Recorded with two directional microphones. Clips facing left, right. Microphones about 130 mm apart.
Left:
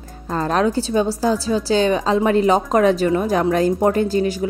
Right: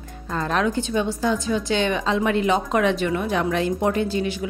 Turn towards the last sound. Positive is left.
turn(degrees=40)  # may be behind; listen again after turning